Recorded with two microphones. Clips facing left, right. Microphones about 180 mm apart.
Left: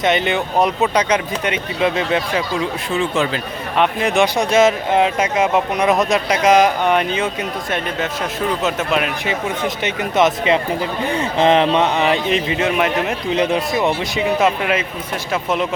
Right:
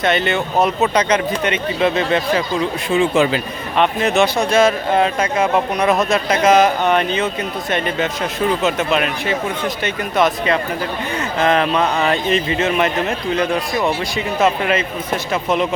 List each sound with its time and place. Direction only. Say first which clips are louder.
0.0 s speech: even; 15° left (ahead or behind)
2.9 s speech: right 5 dB; 10° right (ahead or behind)
3.8 s speech: right 1 dB; 15° left (ahead or behind)
9.2 s speech: right 1 dB; 20° left (ahead or behind)
13.3 s speech: left 3 dB; 20° left (ahead or behind)
14.4 s speech: right 1 dB; 10° left (ahead or behind)